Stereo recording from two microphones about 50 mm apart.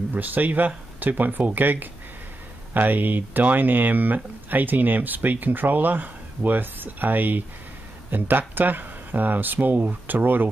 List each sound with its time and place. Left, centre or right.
0.1 s speech: right